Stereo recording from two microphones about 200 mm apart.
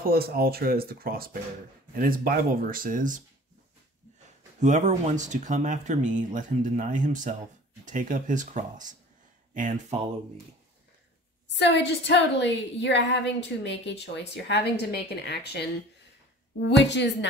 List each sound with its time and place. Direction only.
0.0 s speech: 50° right (ahead or behind)
4.6 s speech: 35° right (ahead or behind)
11.4 s a woman's voice: 60° left (ahead or behind)